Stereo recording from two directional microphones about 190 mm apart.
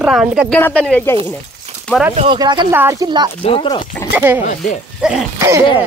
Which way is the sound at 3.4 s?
30° left (ahead or behind).